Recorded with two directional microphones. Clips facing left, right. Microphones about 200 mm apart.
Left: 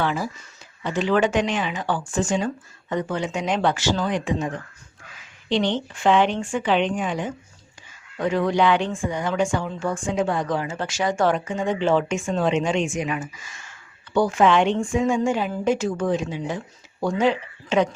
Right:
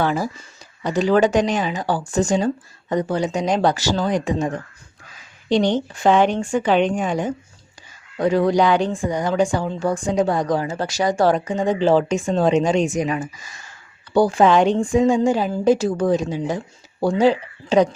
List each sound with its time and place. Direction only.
0.0 s a woman's voice: 40° right (ahead or behind)